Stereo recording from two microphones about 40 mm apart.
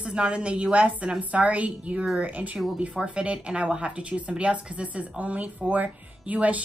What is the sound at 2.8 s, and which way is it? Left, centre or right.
A woman's voice, right.